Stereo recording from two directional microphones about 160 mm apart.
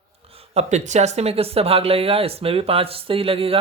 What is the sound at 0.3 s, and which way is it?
Speech, 40° right (ahead or behind).